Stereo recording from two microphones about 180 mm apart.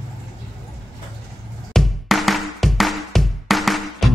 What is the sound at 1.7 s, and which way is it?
Music, centre (ahead or behind).